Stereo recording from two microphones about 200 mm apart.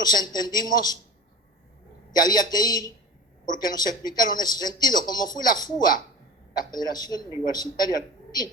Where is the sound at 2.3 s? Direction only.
20° left (ahead or behind).